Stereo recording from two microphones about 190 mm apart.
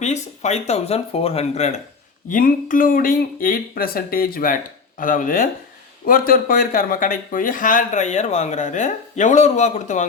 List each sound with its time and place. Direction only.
0.0 s speech: 35° left (ahead or behind)